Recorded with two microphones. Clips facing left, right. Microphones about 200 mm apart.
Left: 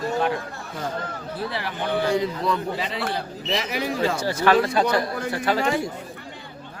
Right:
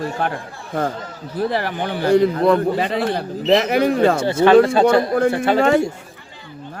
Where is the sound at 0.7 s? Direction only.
55° right (ahead or behind).